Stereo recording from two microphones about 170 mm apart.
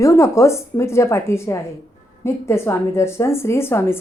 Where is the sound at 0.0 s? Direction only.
15° left (ahead or behind).